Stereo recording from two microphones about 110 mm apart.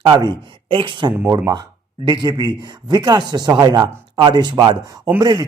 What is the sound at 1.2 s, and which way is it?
Speech, 35° right (ahead or behind).